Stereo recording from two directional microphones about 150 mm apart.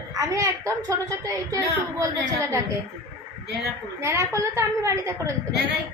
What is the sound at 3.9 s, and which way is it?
A woman's voice, 20° right (ahead or behind).